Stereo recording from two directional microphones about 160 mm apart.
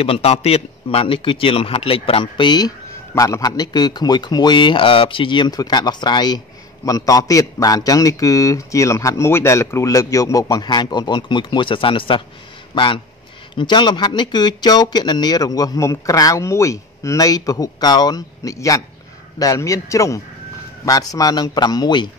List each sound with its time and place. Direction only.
0.0 s a man's voice: 40° left (ahead or behind)